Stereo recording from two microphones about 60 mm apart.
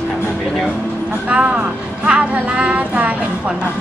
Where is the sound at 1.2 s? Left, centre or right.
Right.